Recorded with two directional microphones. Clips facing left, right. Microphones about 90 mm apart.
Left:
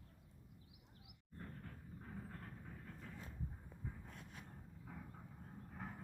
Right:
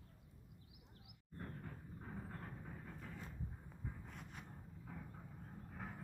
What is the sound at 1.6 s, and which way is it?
Vehicle, 15° right (ahead or behind).